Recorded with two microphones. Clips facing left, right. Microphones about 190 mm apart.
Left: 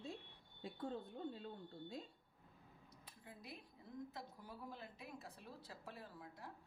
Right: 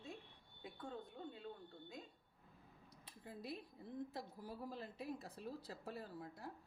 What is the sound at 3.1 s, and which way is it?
A woman's voice, 35° right (ahead or behind).